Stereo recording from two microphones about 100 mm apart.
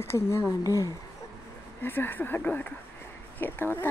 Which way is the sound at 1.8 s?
20° left (ahead or behind).